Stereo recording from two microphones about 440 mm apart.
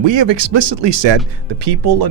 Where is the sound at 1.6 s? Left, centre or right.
Right.